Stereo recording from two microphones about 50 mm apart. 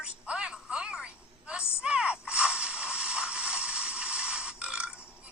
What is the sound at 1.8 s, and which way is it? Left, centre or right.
Mechanisms, right.